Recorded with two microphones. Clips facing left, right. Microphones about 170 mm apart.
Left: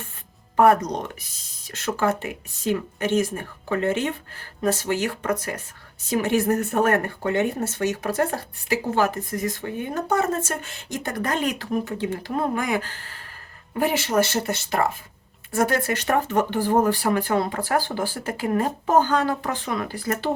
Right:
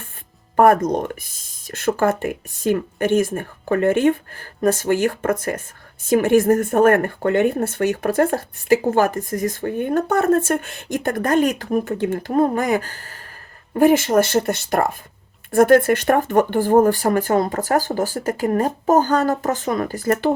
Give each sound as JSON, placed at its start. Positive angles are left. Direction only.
{"t": 0.5, "sound": "speech", "side_deg": -50}